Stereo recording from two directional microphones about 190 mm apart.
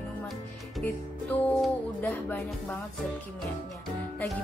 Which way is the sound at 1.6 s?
10° left (ahead or behind).